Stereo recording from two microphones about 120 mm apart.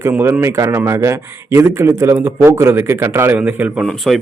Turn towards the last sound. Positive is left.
turn(degrees=0)  # may be behind; listen again after turning